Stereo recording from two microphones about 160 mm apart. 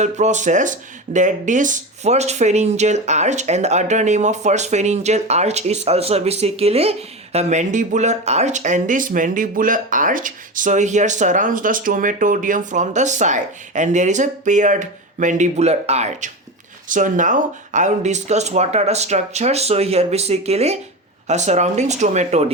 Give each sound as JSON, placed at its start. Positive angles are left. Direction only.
{"t": 0.0, "sound": "speech", "side_deg": -45}